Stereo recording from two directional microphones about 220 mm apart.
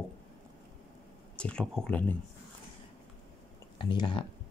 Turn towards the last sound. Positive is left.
turn(degrees=20)  # may be behind; listen again after turning